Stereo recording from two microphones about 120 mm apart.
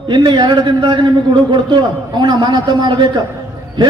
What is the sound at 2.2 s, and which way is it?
Speech, 40° right (ahead or behind).